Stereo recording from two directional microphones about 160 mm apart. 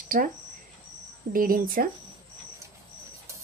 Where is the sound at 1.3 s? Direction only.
65° right (ahead or behind).